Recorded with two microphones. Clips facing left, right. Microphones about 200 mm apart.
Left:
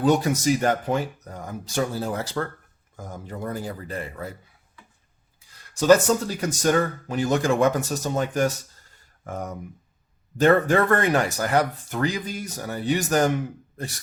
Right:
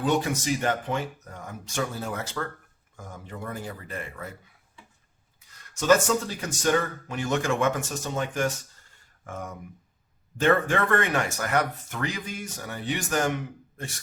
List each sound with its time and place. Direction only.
0.0 s speech: 40° left (ahead or behind)
5.4 s speech: 35° left (ahead or behind)